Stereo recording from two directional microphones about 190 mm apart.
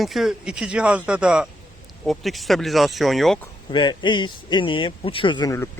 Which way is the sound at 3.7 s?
25° left (ahead or behind).